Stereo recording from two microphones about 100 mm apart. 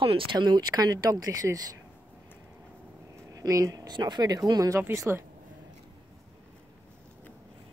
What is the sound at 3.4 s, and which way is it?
Speech, 35° right (ahead or behind).